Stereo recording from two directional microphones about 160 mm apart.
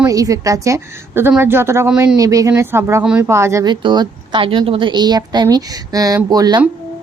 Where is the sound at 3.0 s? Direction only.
5° right (ahead or behind).